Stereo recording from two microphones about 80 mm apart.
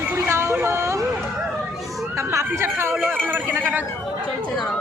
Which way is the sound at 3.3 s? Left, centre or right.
Right.